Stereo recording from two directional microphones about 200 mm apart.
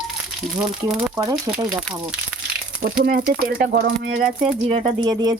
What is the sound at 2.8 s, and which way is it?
Speech, 45° right (ahead or behind).